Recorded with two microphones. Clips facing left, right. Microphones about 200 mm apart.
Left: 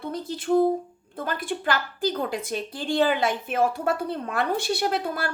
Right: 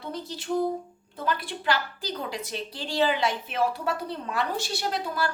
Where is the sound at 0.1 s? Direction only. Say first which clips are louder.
Left 3 dB; 50° left (ahead or behind).